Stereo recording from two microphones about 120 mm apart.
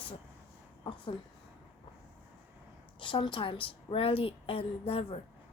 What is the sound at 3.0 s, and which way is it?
A woman's voice, 45° left (ahead or behind).